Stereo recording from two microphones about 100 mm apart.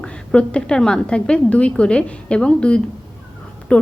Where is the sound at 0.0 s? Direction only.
10° left (ahead or behind).